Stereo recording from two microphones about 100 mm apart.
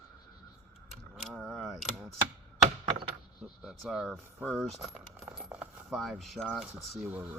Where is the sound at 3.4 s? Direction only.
5° right (ahead or behind).